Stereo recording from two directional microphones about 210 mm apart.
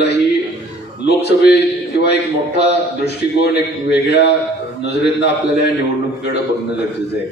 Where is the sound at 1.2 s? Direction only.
50° left (ahead or behind).